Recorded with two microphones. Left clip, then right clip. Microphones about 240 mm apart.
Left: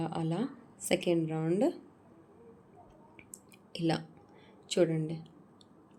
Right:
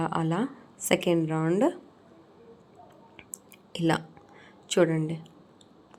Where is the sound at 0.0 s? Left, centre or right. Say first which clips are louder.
Right 7 dB; centre.